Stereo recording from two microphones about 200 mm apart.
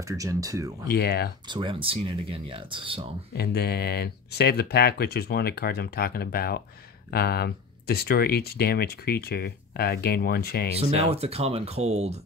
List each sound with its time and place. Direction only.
0.1 s speech: 15° right (ahead or behind)
0.8 s speech: 55° left (ahead or behind)
1.5 s speech: 25° right (ahead or behind)
3.3 s speech: 55° left (ahead or behind)
11.1 s speech: 30° right (ahead or behind)